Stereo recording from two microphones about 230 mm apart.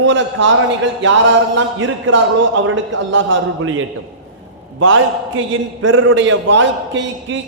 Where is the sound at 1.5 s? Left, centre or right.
Right.